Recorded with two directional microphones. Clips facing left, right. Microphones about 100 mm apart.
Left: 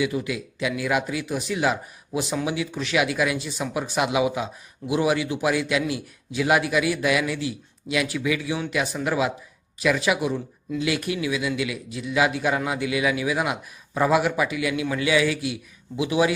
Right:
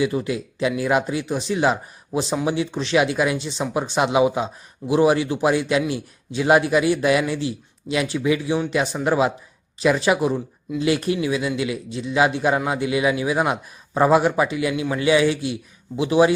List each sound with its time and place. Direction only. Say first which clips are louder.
0.0 s a man's voice: right 3 dB; 35° right (ahead or behind)